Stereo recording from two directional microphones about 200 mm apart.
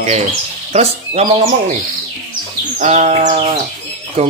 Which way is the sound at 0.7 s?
35° right (ahead or behind).